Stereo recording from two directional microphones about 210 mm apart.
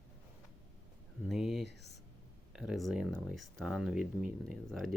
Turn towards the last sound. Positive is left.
turn(degrees=0)  # may be behind; listen again after turning